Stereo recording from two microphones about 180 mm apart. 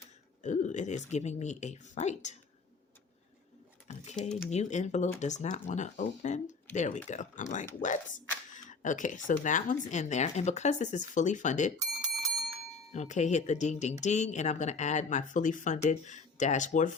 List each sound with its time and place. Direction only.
0.4 s speech: 40° left (ahead or behind)
3.8 s typing: 40° left (ahead or behind)
4.4 s speech: 40° left (ahead or behind)
12.9 s speech: 40° left (ahead or behind)